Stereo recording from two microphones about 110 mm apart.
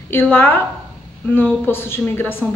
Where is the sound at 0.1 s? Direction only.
15° left (ahead or behind).